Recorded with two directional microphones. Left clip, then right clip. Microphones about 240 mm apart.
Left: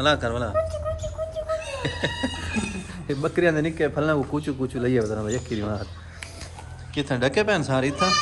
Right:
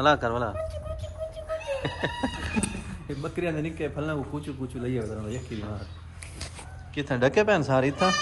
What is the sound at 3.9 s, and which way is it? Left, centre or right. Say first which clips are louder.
Speech: left 8 dB; left.